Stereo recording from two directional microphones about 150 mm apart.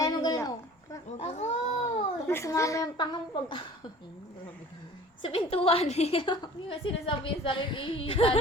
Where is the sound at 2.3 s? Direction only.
20° left (ahead or behind).